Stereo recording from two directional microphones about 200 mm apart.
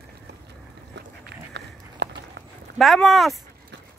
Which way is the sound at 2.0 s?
60° right (ahead or behind).